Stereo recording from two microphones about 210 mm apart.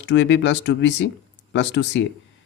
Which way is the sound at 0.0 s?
60° left (ahead or behind).